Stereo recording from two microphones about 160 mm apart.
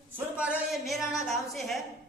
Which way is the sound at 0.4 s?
5° right (ahead or behind).